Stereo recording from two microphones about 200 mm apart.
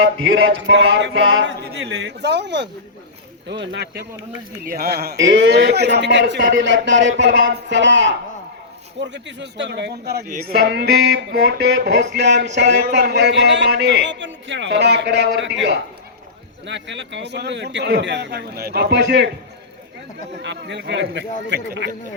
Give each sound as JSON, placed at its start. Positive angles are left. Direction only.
{"t": 0.2, "sound": "speech", "side_deg": -70}
{"t": 20.4, "sound": "speech", "side_deg": -65}